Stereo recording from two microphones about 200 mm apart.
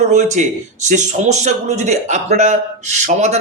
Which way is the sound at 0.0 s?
35° right (ahead or behind).